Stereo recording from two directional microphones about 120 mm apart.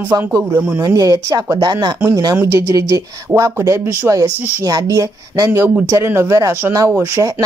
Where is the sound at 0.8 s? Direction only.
30° right (ahead or behind).